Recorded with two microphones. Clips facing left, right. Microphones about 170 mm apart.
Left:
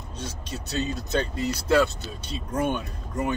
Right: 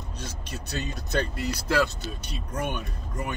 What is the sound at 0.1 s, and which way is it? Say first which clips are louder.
Speech: left 5 dB; 25° left (ahead or behind).